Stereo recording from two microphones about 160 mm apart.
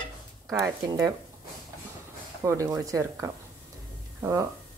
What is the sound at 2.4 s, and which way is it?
Speech, 20° right (ahead or behind).